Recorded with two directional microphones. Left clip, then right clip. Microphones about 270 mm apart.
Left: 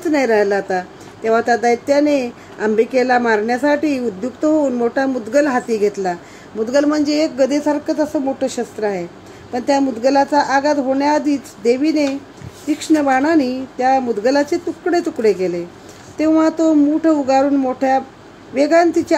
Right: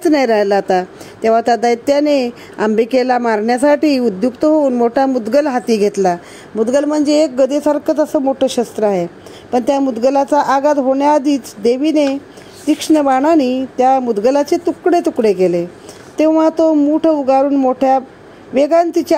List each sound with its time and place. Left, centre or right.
0.0 s a woman's voice: right